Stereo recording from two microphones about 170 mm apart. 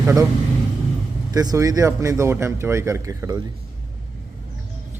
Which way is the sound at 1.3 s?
20° right (ahead or behind).